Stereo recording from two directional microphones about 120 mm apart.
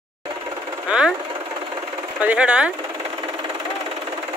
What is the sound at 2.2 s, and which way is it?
Speech, 10° right (ahead or behind).